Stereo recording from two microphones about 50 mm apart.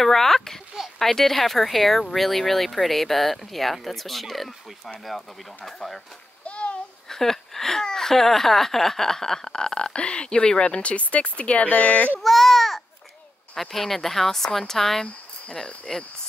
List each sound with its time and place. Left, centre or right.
0.0 s speech: centre
6.4 s a sound: left
7.1 s speech: centre; by 12.2 s left
12.2 s baby cry: centre
13.6 s speech: centre